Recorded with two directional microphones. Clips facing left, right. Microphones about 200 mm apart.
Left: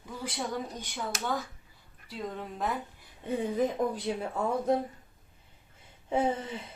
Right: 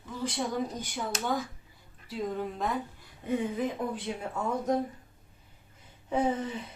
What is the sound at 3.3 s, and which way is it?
Speech, 35° left (ahead or behind).